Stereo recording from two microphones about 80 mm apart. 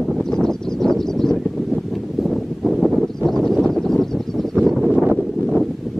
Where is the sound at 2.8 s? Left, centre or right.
Centre.